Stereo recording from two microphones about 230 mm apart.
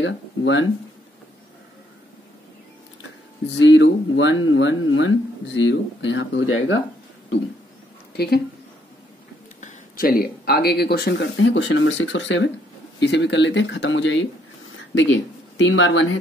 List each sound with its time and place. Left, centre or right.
0.0 s speech: left
3.5 s speech: left
8.2 s speech: left
9.6 s speech: left